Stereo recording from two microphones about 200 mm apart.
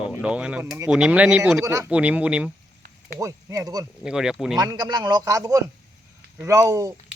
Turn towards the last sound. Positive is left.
turn(degrees=-15)  # may be behind; listen again after turning